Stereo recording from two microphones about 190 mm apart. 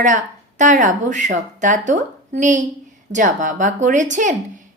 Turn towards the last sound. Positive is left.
turn(degrees=-40)  # may be behind; listen again after turning